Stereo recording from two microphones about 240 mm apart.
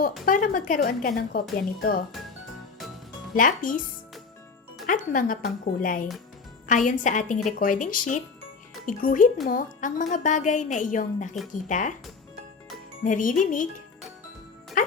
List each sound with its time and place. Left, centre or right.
0.3 s speech: left
3.3 s speech: left
4.9 s speech: left
13.0 s speech: left
14.8 s music: left